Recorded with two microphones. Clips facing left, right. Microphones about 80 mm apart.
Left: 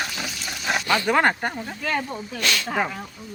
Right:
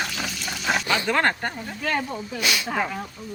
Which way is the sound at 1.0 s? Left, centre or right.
Centre.